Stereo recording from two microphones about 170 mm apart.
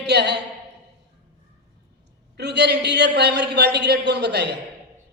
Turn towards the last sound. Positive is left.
turn(degrees=-80)